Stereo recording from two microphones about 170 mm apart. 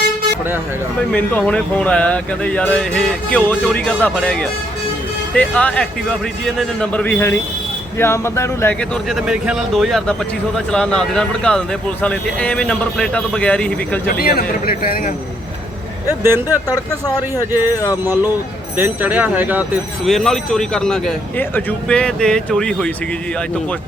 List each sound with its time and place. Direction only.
1.1 s speech: 5° left (ahead or behind)
9.0 s speech: 5° right (ahead or behind)
14.1 s a man's voice: 60° left (ahead or behind)
16.0 s speech: 15° right (ahead or behind)
17.7 s a sound: 20° left (ahead or behind)
18.0 s speech: 15° right (ahead or behind)
20.1 s speech: centre (ahead or behind)